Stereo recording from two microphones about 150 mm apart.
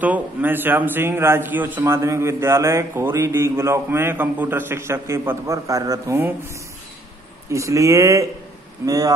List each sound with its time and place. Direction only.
0.0 s a man's voice: 10° right (ahead or behind)
7.5 s speech: 20° right (ahead or behind)